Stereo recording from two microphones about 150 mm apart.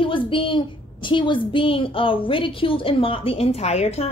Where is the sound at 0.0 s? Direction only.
35° left (ahead or behind).